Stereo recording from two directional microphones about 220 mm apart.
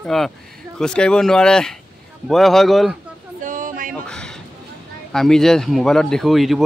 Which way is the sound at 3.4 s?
35° right (ahead or behind).